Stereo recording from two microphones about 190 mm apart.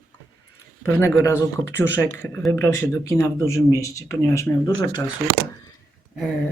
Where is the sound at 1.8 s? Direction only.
10° left (ahead or behind).